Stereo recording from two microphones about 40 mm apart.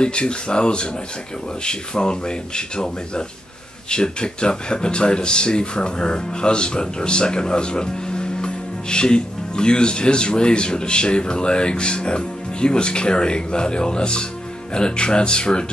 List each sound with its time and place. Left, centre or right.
0.0 s speech: left